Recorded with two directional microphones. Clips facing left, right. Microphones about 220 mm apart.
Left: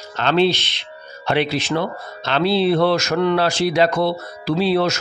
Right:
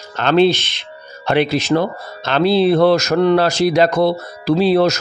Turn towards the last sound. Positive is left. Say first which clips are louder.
# right 5 dB
turn(degrees=-40)  # may be behind; listen again after turning